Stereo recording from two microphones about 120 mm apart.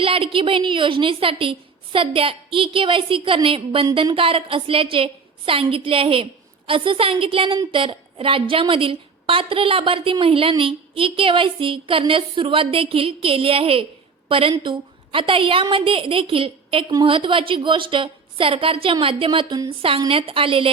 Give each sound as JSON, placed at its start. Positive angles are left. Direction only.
{"t": 0.0, "sound": "a woman's voice", "side_deg": -50}